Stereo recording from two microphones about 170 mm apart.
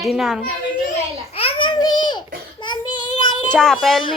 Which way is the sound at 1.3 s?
35° left (ahead or behind).